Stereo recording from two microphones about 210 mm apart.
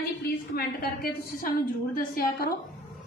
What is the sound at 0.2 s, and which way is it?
A woman's voice, 45° left (ahead or behind).